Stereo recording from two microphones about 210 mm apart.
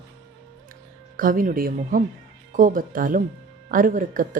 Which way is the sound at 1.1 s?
40° right (ahead or behind).